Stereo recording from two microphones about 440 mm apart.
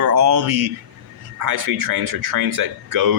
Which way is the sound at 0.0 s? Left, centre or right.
Right.